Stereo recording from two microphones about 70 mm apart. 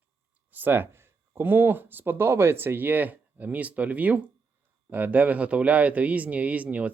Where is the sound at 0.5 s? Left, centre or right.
Right.